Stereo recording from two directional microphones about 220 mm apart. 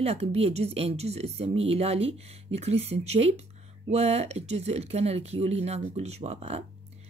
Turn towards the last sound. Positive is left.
turn(degrees=-25)  # may be behind; listen again after turning